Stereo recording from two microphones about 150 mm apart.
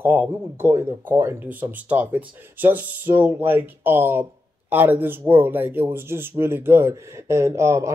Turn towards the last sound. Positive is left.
turn(degrees=-20)  # may be behind; listen again after turning